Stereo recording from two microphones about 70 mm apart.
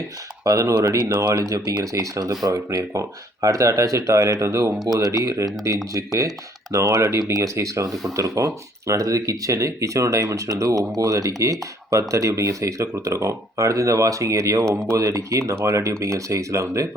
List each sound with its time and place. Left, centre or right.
0.4 s speech: right
4.9 s speech: right